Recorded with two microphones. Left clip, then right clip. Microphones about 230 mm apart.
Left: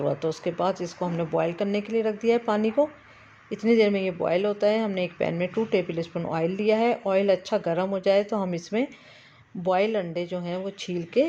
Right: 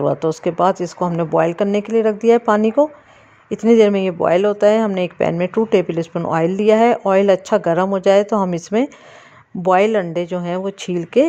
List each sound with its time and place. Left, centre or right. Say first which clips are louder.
0.0 s speech: right 9 dB; right